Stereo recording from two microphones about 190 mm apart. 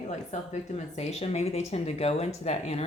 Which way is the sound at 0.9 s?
35° left (ahead or behind).